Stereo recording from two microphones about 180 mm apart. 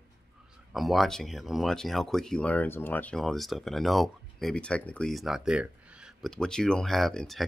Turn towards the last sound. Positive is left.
turn(degrees=0)  # may be behind; listen again after turning